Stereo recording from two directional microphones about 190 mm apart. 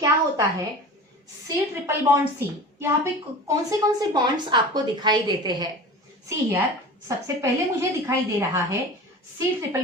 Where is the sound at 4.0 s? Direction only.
20° right (ahead or behind).